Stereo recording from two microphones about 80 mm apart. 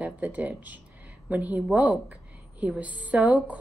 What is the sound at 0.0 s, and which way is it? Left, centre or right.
A woman's voice, centre.